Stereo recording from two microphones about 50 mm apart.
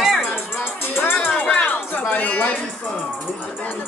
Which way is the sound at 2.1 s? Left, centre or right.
Left.